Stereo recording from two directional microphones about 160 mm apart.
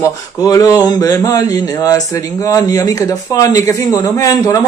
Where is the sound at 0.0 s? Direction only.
20° left (ahead or behind).